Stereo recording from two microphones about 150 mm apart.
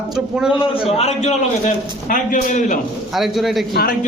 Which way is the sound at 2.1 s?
60° left (ahead or behind).